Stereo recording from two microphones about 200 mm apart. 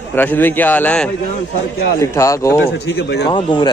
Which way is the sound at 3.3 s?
20° left (ahead or behind).